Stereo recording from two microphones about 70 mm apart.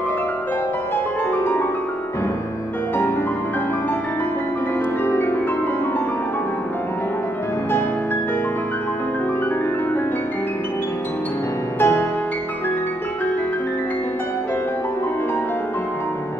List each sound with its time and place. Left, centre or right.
1.3 s music: left
5.0 s music: left
11.8 s music: left